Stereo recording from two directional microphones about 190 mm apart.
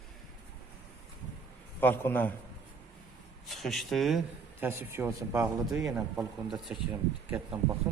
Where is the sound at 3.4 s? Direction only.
Centre (ahead or behind).